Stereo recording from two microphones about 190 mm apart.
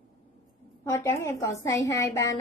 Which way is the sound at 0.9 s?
15° left (ahead or behind).